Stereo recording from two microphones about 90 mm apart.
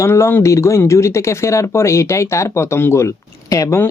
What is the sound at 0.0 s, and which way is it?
Speech, 30° left (ahead or behind).